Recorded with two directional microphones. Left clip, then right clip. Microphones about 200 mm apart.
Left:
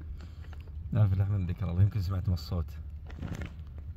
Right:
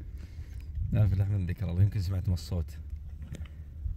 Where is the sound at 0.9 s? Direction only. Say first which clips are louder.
Even; 15° right (ahead or behind).